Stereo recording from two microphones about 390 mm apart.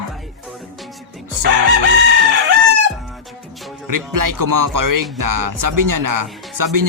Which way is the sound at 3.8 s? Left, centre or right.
Right.